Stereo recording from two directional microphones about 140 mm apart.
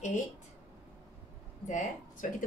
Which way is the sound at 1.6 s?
60° left (ahead or behind).